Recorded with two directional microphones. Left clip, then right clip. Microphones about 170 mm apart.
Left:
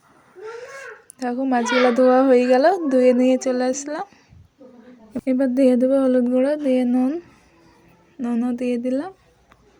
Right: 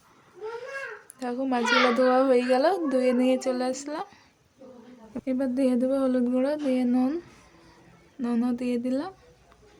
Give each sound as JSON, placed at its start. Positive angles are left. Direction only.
{"t": 1.2, "sound": "speech", "side_deg": 20}
{"t": 5.1, "sound": "speech", "side_deg": 30}
{"t": 8.2, "sound": "speech", "side_deg": 15}